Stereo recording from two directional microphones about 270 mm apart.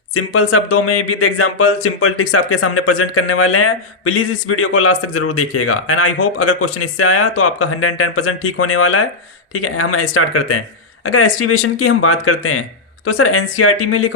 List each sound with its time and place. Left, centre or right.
0.1 s speech: left